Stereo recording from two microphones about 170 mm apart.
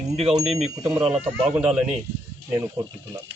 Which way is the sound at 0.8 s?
25° right (ahead or behind).